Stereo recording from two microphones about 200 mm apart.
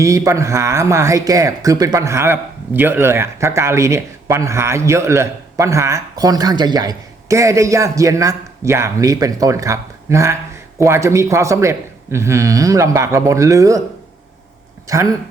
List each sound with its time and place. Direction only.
0.0 s speech: 15° right (ahead or behind)
14.8 s speech: 15° right (ahead or behind)